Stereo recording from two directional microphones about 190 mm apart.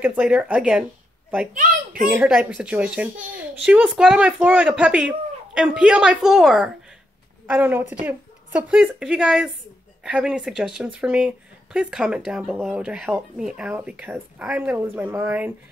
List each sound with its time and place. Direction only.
0.0 s speech: 10° right (ahead or behind)
1.5 s a child's voice: 45° right (ahead or behind)
2.0 s speech: 5° right (ahead or behind)